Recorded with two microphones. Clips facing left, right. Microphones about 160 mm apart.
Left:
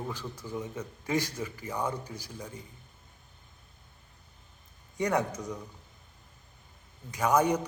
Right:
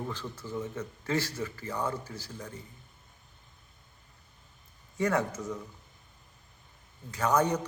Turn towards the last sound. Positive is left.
turn(degrees=10)  # may be behind; listen again after turning